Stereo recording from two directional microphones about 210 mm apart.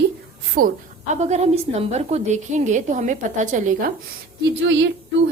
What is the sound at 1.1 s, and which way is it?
A woman's voice, 30° right (ahead or behind).